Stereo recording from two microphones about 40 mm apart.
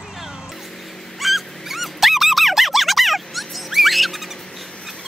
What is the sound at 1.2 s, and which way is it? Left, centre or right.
Dog, centre.